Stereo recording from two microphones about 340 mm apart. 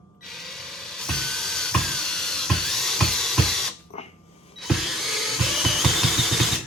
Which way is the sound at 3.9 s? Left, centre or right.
Centre.